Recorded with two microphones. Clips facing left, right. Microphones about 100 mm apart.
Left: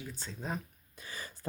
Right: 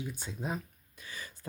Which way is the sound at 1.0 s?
35° left (ahead or behind).